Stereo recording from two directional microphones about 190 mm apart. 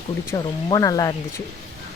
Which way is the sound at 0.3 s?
20° left (ahead or behind).